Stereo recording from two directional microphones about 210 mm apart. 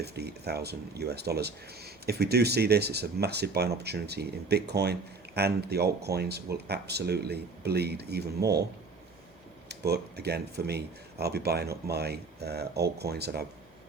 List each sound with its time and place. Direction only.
0.0 s speech: 50° right (ahead or behind)
9.6 s speech: 50° right (ahead or behind)